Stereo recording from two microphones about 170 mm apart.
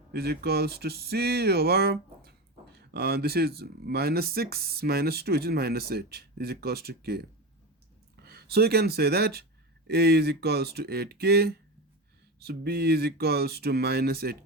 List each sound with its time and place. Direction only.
0.1 s speech: 70° right (ahead or behind)